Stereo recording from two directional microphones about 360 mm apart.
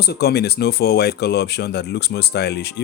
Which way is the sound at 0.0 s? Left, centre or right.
Left.